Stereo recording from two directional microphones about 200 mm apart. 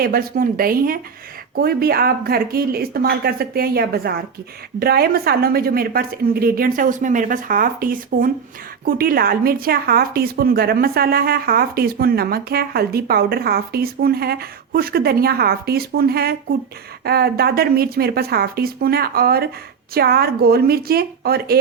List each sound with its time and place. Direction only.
0.0 s speech: 50° right (ahead or behind)